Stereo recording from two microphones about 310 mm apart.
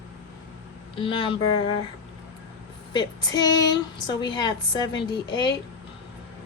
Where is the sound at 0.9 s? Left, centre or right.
Centre.